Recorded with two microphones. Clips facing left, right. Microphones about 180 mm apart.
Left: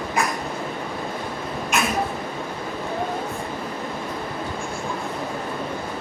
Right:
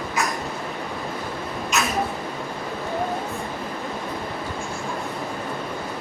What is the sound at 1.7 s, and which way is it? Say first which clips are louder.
Rodents: left 1 dB; 55° left (ahead or behind).